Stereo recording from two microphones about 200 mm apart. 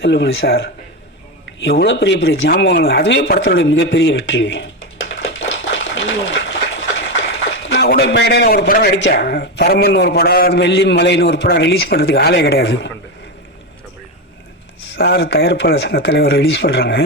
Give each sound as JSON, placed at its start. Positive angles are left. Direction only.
{"t": 0.0, "sound": "a man's voice", "side_deg": 60}
{"t": 2.5, "sound": "speech", "side_deg": 55}
{"t": 7.2, "sound": "a sound", "side_deg": 60}
{"t": 9.0, "sound": "a man's voice", "side_deg": 60}
{"t": 14.9, "sound": "a man's voice", "side_deg": 55}